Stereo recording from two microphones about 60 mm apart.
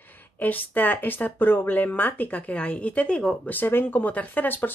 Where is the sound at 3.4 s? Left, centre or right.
Left.